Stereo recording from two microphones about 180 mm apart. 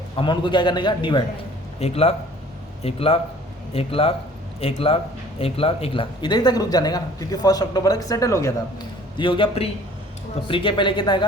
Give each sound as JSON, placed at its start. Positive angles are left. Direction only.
{"t": 0.2, "sound": "speech", "side_deg": 25}